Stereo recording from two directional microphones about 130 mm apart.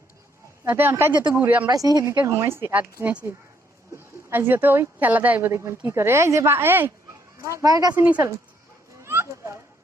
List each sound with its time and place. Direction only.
0.7 s speech: 15° right (ahead or behind)
1.6 s speech: 30° right (ahead or behind)
7.9 s speech: 15° right (ahead or behind)
9.0 s a sound: 20° right (ahead or behind)